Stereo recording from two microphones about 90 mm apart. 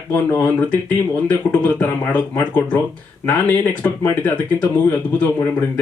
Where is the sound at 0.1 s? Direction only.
25° left (ahead or behind).